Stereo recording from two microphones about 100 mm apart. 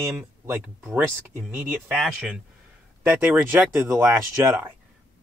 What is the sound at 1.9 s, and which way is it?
Speech, 5° right (ahead or behind).